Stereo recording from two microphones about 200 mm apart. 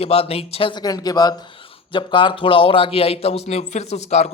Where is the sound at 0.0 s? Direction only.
30° left (ahead or behind).